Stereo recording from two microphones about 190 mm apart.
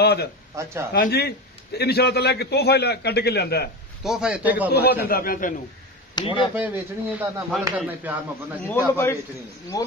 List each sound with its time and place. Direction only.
0.0 s a man's voice: 55° left (ahead or behind)
0.5 s speech: 15° right (ahead or behind)
0.9 s a man's voice: 55° left (ahead or behind)
4.0 s speech: 5° right (ahead or behind)
5.0 s a man's voice: 50° left (ahead or behind)
6.1 s speech: 25° left (ahead or behind)
6.5 s speech: 10° right (ahead or behind)
8.6 s a man's voice: 10° left (ahead or behind)